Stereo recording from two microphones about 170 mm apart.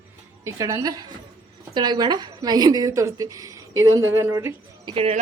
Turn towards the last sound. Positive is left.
turn(degrees=-35)  # may be behind; listen again after turning